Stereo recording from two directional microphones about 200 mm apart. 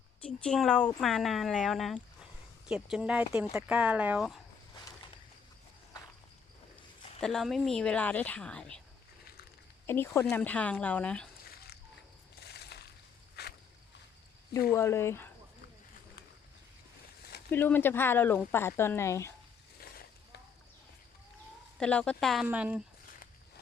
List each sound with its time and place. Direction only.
0.2 s speech: 5° left (ahead or behind)
7.2 s speech: centre (ahead or behind)
9.8 s speech: 10° left (ahead or behind)
12.4 s crushing: 55° left (ahead or behind)
13.4 s boat: 55° left (ahead or behind)
14.7 s speech: 15° left (ahead or behind)
17.5 s speech: 10° left (ahead or behind)
19.8 s a sound: 50° left (ahead or behind)
21.8 s speech: 5° left (ahead or behind)